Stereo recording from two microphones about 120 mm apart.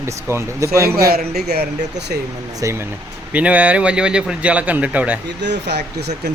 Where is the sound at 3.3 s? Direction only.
10° right (ahead or behind).